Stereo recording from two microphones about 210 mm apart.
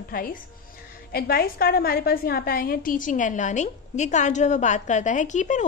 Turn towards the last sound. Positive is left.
turn(degrees=35)  # may be behind; listen again after turning